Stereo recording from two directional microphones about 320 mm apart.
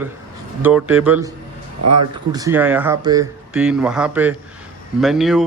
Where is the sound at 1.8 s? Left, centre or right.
Right.